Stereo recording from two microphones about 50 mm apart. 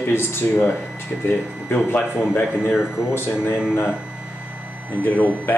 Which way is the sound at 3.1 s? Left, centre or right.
Left.